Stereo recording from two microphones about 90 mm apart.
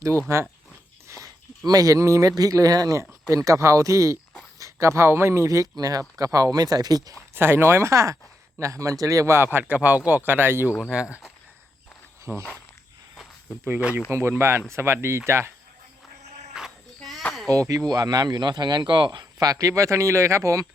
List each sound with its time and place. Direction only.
0.3 s speech: 35° right (ahead or behind)
1.0 s a sound: 35° right (ahead or behind)
1.6 s speech: 40° right (ahead or behind)
7.3 s speech: 25° right (ahead or behind)
10.9 s speech: 10° right (ahead or behind)
12.2 s speech: 30° right (ahead or behind)
14.1 s speech: 25° right (ahead or behind)
16.6 s child singing: 5° right (ahead or behind)
17.5 s speech: 40° right (ahead or behind); by 19.2 s 60° right (ahead or behind)
19.2 s speech: 45° right (ahead or behind)